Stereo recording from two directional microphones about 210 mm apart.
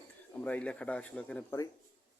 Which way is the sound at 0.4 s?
5° left (ahead or behind).